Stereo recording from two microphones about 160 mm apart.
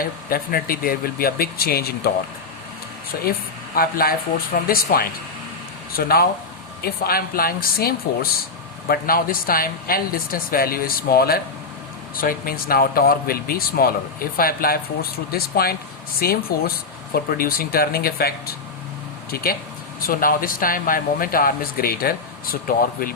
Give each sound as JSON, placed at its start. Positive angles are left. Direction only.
{"t": 0.0, "sound": "a man's voice", "side_deg": 65}
{"t": 2.0, "sound": "speech", "side_deg": 85}
{"t": 3.8, "sound": "a man's voice", "side_deg": 65}
{"t": 12.1, "sound": "a man's voice", "side_deg": 60}